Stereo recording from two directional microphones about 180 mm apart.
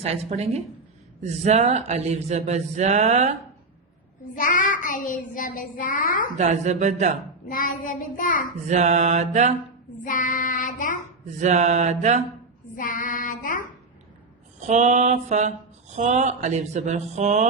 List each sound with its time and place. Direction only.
0.0 s speech: 35° right (ahead or behind)
4.4 s child singing: 45° left (ahead or behind)
6.3 s speech: 40° right (ahead or behind)
7.4 s child singing: 50° left (ahead or behind)
8.6 s speech: 40° right (ahead or behind)
10.0 s child singing: 45° left (ahead or behind)
11.3 s speech: 40° right (ahead or behind)
12.7 s child singing: 50° left (ahead or behind)
14.7 s speech: 40° right (ahead or behind)